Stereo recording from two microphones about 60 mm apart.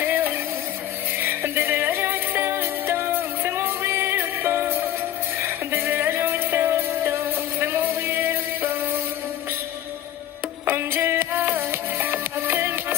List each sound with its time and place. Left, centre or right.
0.0 s a sound: right
1.2 s music: right
10.7 s music: right